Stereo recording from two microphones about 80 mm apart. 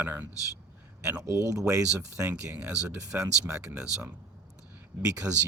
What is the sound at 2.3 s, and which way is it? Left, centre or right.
Speech, right.